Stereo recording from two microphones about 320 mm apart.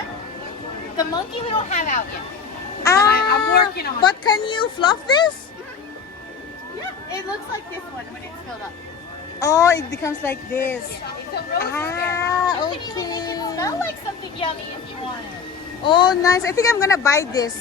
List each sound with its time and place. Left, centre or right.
0.9 s a child's voice: centre
2.8 s a child's voice: centre
3.1 s speech: left
4.0 s a child's voice: centre
9.4 s a child's voice: centre
15.8 s a child's voice: centre